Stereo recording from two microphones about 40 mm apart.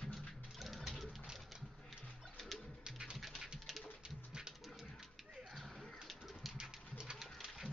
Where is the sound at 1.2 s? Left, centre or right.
Centre.